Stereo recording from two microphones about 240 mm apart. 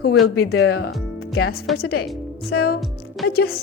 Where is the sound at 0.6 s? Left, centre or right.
Left.